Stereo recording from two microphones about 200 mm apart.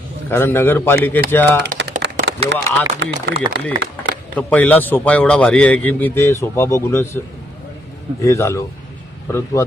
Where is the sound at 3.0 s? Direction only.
60° right (ahead or behind).